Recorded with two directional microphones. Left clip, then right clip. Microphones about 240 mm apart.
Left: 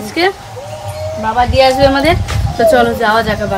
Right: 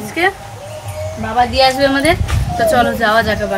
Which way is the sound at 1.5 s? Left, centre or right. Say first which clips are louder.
Left 5 dB; centre.